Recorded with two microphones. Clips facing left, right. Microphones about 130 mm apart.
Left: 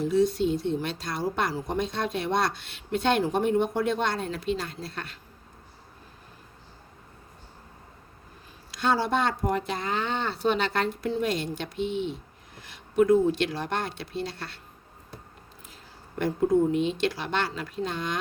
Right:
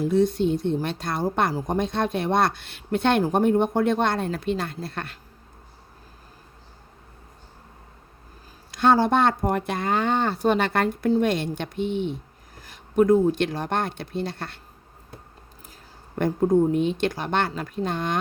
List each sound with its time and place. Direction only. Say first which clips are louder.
0.0 s a woman's voice: right 2 dB; 55° right (ahead or behind)
8.7 s a woman's voice: right 6 dB; 50° right (ahead or behind)
16.1 s a woman's voice: right 3 dB; 45° right (ahead or behind)